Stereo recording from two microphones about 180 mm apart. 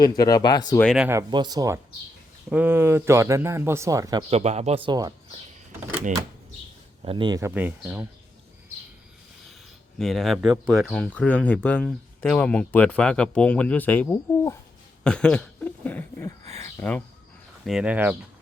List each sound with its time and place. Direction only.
0.0 s speech: 20° left (ahead or behind)
0.9 s speech: 10° right (ahead or behind)
1.3 s speech: 25° right (ahead or behind)
4.3 s speech: 35° right (ahead or behind)
7.0 s speech: 30° right (ahead or behind); by 8.0 s 5° right (ahead or behind)
10.0 s speech: centre (ahead or behind)
17.7 s speech: 5° right (ahead or behind)